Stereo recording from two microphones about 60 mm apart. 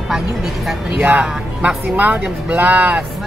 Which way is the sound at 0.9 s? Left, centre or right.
Right.